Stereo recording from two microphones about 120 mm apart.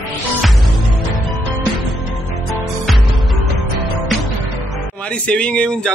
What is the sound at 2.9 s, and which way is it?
Music, centre (ahead or behind).